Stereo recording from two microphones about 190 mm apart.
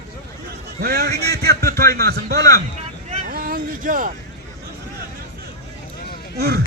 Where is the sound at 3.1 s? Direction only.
45° right (ahead or behind).